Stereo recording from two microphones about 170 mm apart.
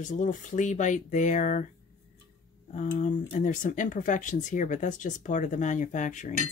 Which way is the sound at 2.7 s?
50° left (ahead or behind).